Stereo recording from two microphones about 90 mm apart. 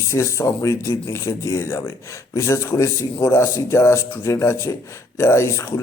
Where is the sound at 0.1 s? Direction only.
35° left (ahead or behind).